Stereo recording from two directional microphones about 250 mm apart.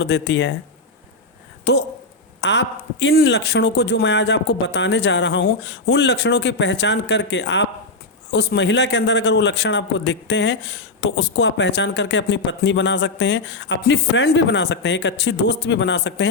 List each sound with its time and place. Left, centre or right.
0.0 s a man's voice: left
1.7 s a man's voice: left